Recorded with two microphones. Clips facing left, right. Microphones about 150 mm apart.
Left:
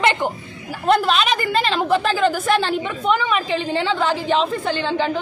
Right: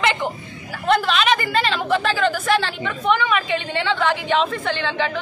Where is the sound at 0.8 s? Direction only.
Centre (ahead or behind).